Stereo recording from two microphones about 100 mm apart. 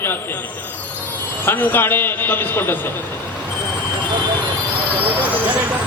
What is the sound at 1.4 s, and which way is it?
A man's voice, 20° left (ahead or behind).